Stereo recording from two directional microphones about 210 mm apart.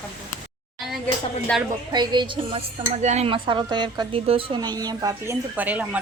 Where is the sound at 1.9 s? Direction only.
20° right (ahead or behind).